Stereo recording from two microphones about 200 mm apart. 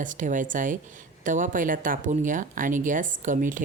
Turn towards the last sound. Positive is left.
turn(degrees=-40)  # may be behind; listen again after turning